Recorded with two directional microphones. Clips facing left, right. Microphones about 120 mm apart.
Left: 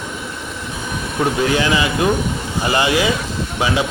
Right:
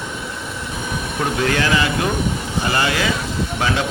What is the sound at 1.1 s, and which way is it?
A man's voice, 10° left (ahead or behind).